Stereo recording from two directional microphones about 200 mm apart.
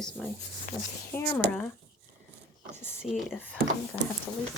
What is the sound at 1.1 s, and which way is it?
Speech, 10° left (ahead or behind).